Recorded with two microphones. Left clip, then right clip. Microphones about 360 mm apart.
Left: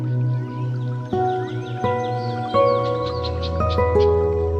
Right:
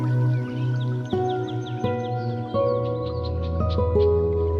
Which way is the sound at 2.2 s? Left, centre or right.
Centre.